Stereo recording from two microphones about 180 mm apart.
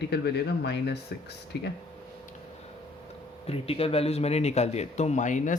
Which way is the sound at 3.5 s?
35° left (ahead or behind).